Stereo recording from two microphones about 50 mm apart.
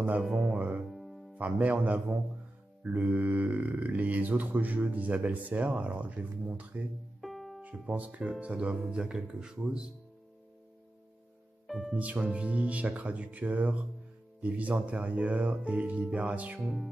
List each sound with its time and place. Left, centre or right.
0.3 s speech: centre
0.6 s music: right
0.8 s music: centre
1.4 s speech: right
7.2 s music: centre
7.6 s speech: right
11.6 s music: centre
12.0 s speech: right
16.6 s music: centre